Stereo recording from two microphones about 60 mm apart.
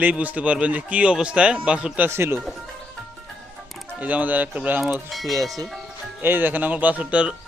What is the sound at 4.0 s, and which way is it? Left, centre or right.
Speech, right.